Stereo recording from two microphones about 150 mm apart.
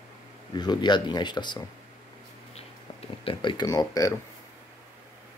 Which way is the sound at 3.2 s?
30° left (ahead or behind).